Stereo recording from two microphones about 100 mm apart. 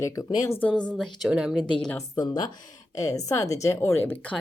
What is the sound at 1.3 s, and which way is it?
Speech, 10° right (ahead or behind).